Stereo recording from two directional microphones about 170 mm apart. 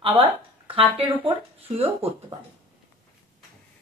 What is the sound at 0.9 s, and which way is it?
Speech, 30° right (ahead or behind).